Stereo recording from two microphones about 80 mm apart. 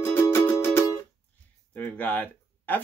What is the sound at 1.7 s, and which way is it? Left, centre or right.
Speech, left.